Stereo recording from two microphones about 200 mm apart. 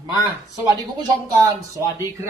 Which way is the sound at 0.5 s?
20° right (ahead or behind).